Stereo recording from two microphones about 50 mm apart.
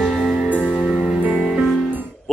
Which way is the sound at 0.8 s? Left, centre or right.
Centre.